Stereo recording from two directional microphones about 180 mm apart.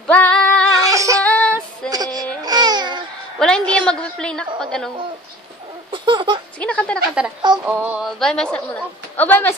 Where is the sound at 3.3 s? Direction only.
5° left (ahead or behind).